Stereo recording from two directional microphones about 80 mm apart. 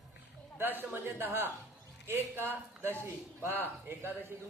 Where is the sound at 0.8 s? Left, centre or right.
Right.